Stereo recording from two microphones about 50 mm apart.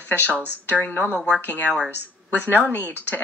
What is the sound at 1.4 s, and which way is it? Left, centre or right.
Speech, left.